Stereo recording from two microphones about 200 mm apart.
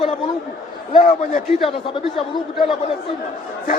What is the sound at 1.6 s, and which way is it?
Speech, 25° left (ahead or behind).